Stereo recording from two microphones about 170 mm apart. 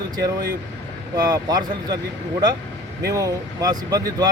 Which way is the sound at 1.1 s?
25° right (ahead or behind).